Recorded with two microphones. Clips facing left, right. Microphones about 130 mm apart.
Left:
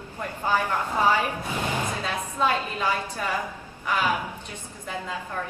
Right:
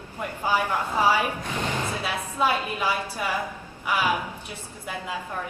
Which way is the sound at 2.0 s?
10° right (ahead or behind).